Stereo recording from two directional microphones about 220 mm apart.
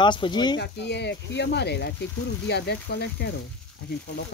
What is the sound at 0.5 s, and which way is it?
Speech, 50° left (ahead or behind).